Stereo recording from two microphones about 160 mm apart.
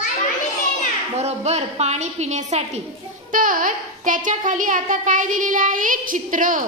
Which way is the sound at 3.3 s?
55° right (ahead or behind).